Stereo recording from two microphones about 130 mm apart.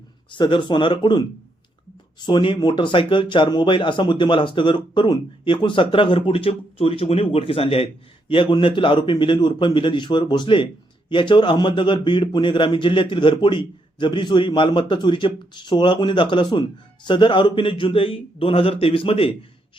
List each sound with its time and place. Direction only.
0.3 s a man's voice: 35° left (ahead or behind)